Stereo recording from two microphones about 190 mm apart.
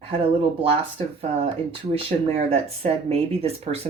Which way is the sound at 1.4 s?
30° right (ahead or behind).